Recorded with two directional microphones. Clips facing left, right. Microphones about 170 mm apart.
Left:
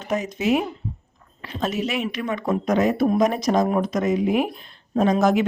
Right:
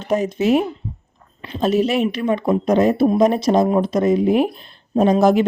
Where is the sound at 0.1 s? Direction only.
35° right (ahead or behind).